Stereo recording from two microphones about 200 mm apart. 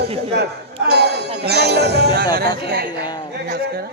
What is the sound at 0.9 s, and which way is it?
Speech, 55° right (ahead or behind).